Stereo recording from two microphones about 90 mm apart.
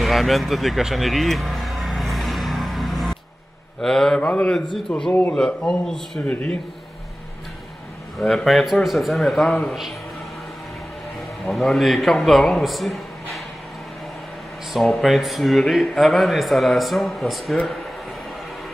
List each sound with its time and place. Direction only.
0.0 s music: centre (ahead or behind)
3.8 s a man's voice: 5° left (ahead or behind)
6.2 s a man's voice: 15° left (ahead or behind)
8.5 s speech: centre (ahead or behind)
11.4 s speech: centre (ahead or behind)
14.7 s speech: centre (ahead or behind)